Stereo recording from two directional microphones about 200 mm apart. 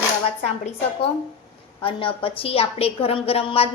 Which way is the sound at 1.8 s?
25° left (ahead or behind).